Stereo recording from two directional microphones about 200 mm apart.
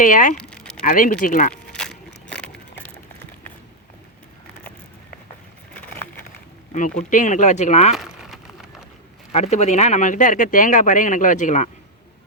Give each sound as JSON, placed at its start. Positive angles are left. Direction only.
{"t": 0.0, "sound": "speech", "side_deg": 40}
{"t": 0.3, "sound": "a sound", "side_deg": 5}
{"t": 0.8, "sound": "speech", "side_deg": 45}
{"t": 1.7, "sound": "a sound", "side_deg": 5}
{"t": 6.7, "sound": "speech", "side_deg": 40}
{"t": 7.9, "sound": "crumpling", "side_deg": 0}
{"t": 9.3, "sound": "speech", "side_deg": 35}